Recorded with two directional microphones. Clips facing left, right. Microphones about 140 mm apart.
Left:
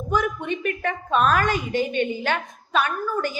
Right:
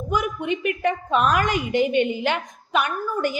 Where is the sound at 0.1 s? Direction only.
15° right (ahead or behind).